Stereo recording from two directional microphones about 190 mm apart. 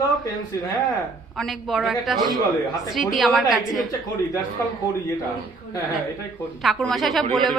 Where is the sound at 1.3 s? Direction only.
Centre (ahead or behind).